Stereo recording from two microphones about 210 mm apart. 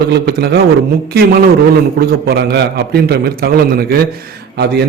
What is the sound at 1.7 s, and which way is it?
A man's voice, 45° right (ahead or behind).